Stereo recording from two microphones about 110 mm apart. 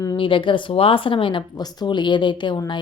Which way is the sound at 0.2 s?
50° left (ahead or behind).